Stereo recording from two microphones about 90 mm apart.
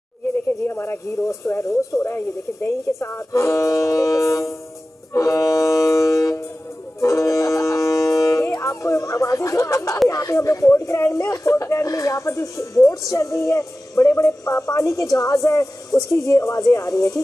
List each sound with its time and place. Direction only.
0.7 s speech: 30° left (ahead or behind)
5.1 s music: 35° left (ahead or behind)
10.0 s speech: 35° left (ahead or behind)